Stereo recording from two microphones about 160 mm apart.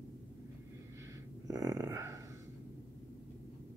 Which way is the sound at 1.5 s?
20° right (ahead or behind).